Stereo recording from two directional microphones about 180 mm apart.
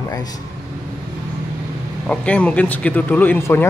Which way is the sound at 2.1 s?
5° left (ahead or behind).